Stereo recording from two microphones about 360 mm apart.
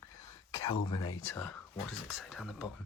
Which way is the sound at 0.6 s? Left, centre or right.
Centre.